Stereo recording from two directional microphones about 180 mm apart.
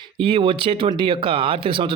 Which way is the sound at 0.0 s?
30° right (ahead or behind).